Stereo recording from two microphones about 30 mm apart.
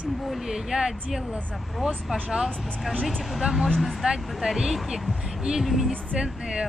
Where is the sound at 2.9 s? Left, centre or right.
Centre.